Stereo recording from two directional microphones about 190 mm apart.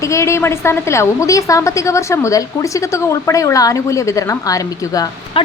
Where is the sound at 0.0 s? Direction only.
15° left (ahead or behind).